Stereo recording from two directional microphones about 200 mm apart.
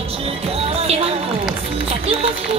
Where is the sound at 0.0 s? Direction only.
30° right (ahead or behind).